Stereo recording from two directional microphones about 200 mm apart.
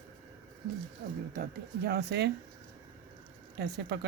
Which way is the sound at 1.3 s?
50° right (ahead or behind).